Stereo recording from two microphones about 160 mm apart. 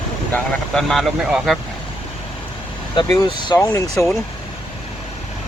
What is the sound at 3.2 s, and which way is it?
Speech, 30° left (ahead or behind).